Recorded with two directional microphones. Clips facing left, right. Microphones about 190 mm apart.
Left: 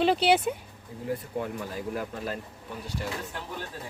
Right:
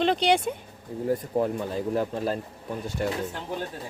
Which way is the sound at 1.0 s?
45° right (ahead or behind).